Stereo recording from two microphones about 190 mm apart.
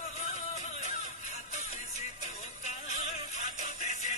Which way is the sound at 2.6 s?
40° left (ahead or behind).